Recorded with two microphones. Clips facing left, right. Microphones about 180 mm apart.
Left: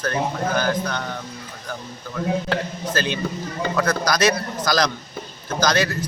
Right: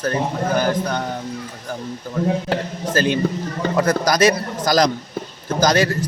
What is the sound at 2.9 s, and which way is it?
A man's voice, 50° right (ahead or behind).